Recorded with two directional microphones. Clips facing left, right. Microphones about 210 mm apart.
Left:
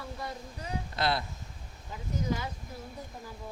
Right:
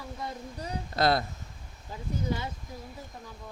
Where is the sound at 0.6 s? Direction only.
40° right (ahead or behind).